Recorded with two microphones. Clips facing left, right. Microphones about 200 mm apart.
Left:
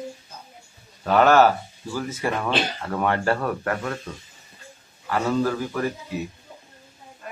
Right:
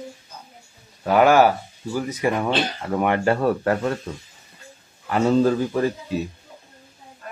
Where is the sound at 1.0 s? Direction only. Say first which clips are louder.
Right 1 dB; 10° right (ahead or behind).